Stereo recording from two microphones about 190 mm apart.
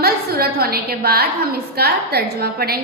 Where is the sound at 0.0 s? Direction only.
55° right (ahead or behind).